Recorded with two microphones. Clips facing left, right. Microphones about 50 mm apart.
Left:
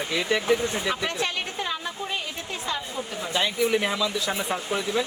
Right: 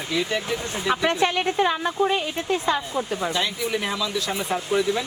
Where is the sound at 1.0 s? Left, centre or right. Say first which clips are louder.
Right 6 dB; right.